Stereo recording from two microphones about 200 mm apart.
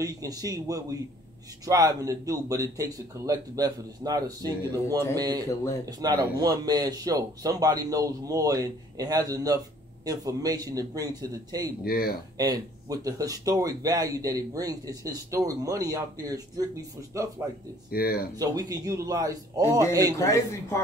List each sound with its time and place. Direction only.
0.0 s speech: 15° right (ahead or behind)
11.8 s speech: 50° left (ahead or behind)
12.4 s speech: 20° right (ahead or behind)
17.9 s speech: 50° left (ahead or behind)
18.4 s speech: 20° right (ahead or behind)
20.1 s a man's voice: 15° left (ahead or behind)